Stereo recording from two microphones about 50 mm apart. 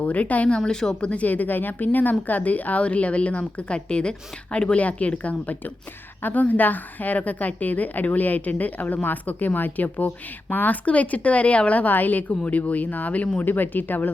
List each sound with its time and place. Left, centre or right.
0.0 s a woman's voice: left
0.5 s a woman's voice: centre
1.0 s a woman's voice: left
13.4 s a woman's voice: left